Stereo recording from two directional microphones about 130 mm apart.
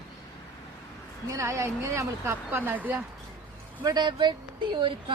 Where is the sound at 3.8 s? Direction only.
35° right (ahead or behind).